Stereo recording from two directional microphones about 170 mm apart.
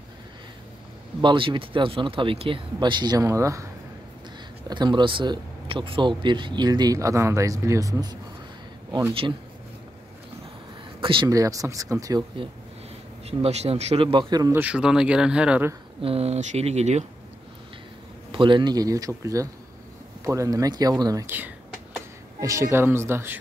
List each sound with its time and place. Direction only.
1.2 s speech: 30° right (ahead or behind)
4.6 s speech: 25° right (ahead or behind)
11.0 s a sound: 30° right (ahead or behind)
11.2 s speech: 20° right (ahead or behind)
13.3 s speech: 40° right (ahead or behind)
14.5 s speech: 10° right (ahead or behind)
16.0 s speech: 35° right (ahead or behind)
18.3 s speech: 30° right (ahead or behind); by 23.4 s 15° right (ahead or behind)